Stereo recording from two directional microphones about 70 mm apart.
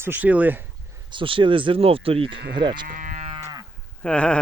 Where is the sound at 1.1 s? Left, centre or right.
Right.